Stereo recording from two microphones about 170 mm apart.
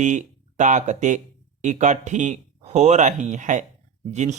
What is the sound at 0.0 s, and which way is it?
Speech, 45° right (ahead or behind).